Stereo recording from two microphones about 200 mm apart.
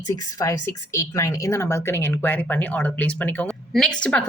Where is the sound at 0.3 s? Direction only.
15° left (ahead or behind).